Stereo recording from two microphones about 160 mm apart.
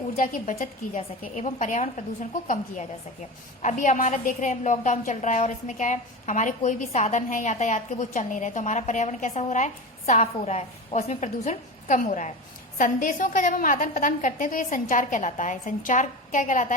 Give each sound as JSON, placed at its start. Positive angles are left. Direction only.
{"t": 0.2, "sound": "a woman's voice", "side_deg": 55}
{"t": 3.6, "sound": "a woman's voice", "side_deg": 50}